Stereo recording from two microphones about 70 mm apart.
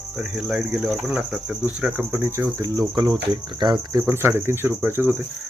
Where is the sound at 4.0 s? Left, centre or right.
Right.